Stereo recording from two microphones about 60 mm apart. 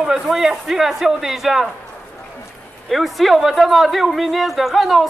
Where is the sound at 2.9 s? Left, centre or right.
Centre.